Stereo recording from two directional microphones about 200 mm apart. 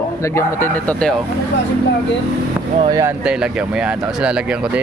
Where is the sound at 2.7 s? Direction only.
25° right (ahead or behind).